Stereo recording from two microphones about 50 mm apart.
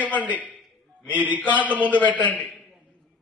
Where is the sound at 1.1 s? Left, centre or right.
Right.